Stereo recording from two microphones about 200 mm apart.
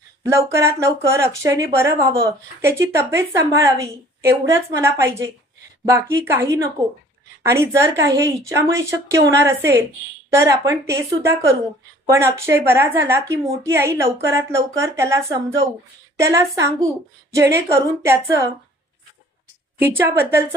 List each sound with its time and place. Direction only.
0.2 s a woman's voice: 15° right (ahead or behind)
19.8 s a woman's voice: 10° right (ahead or behind)